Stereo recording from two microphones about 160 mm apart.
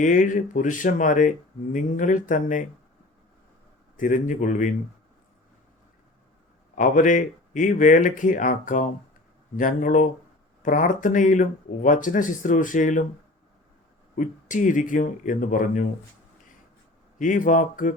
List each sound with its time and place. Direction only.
0.0 s speech: 55° left (ahead or behind)
3.9 s a man's voice: 55° left (ahead or behind)
6.7 s speech: 55° left (ahead or behind)
14.2 s speech: 55° left (ahead or behind)
17.2 s speech: 50° left (ahead or behind)